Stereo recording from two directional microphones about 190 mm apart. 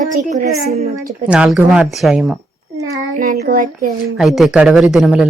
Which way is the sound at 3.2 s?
50° right (ahead or behind).